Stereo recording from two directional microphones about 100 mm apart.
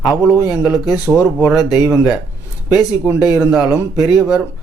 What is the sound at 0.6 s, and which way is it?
Speech, 5° right (ahead or behind).